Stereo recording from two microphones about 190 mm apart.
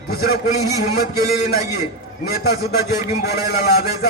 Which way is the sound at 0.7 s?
20° right (ahead or behind).